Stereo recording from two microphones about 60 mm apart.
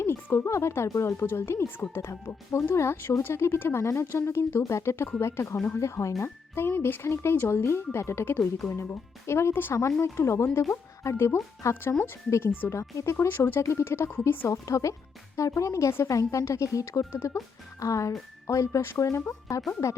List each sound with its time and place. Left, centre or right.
0.0 s a woman's voice: left
1.2 s speech: left
2.0 s speech: left
9.5 s speech: left
10.0 s speech: left
13.6 s a woman's voice: left